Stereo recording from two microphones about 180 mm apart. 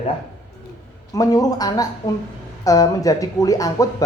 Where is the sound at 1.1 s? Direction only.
20° left (ahead or behind).